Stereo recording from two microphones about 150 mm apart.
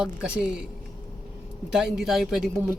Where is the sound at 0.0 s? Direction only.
5° right (ahead or behind).